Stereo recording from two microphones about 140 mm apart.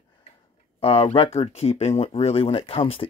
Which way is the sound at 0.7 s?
40° left (ahead or behind).